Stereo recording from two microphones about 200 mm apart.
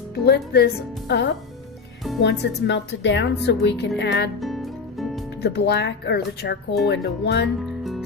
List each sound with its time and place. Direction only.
0.3 s a woman's voice: 55° left (ahead or behind)
4.4 s music: centre (ahead or behind)
5.4 s a woman's voice: 55° left (ahead or behind)
7.6 s music: centre (ahead or behind)